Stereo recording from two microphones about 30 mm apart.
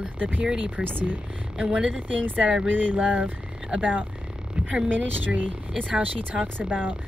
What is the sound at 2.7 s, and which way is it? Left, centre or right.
Speech, right.